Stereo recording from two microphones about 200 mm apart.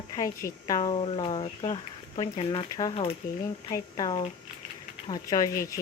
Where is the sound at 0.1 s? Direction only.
15° left (ahead or behind).